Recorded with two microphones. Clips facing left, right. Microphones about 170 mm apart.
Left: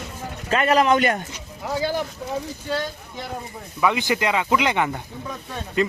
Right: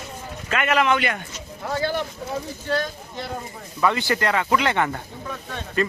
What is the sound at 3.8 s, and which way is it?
Speech, 15° left (ahead or behind).